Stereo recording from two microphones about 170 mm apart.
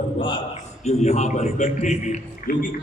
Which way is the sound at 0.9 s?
40° left (ahead or behind).